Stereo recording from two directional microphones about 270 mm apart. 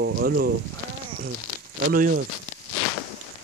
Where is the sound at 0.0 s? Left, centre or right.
Right.